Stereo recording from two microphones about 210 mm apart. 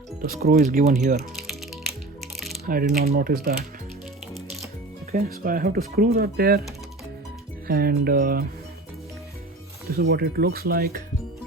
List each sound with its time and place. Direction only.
0.2 s speech: 45° right (ahead or behind)
1.4 s music: centre (ahead or behind)
2.6 s speech: 45° right (ahead or behind)
5.1 s speech: 40° right (ahead or behind)
7.7 s speech: 45° right (ahead or behind)
9.9 s speech: 50° right (ahead or behind)